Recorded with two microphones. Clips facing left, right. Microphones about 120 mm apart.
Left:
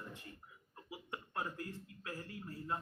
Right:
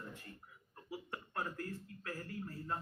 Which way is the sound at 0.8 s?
15° left (ahead or behind).